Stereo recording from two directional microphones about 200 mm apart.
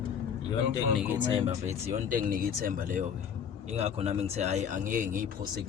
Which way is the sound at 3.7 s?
30° right (ahead or behind).